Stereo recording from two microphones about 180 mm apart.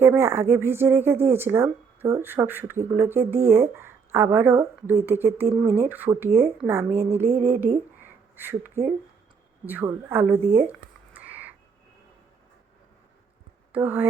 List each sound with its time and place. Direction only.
0.0 s speech: 15° right (ahead or behind)
8.0 s a sound: 10° right (ahead or behind)
9.6 s speech: 10° right (ahead or behind)
10.3 s speech: 30° right (ahead or behind)
10.7 s a sound: 10° right (ahead or behind)
13.7 s speech: 10° right (ahead or behind)